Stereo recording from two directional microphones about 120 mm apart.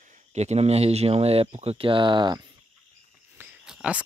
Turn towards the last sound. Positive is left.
turn(degrees=-5)  # may be behind; listen again after turning